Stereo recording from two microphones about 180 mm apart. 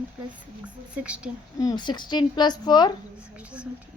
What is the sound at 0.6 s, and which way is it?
Speech, 5° right (ahead or behind).